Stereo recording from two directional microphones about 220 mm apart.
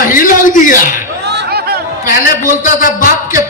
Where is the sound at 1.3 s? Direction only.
45° right (ahead or behind).